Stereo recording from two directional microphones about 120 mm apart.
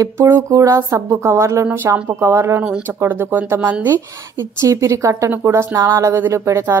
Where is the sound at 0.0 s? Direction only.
25° right (ahead or behind).